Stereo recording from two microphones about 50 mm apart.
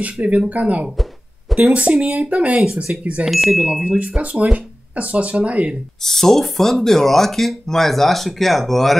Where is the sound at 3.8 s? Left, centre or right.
Centre.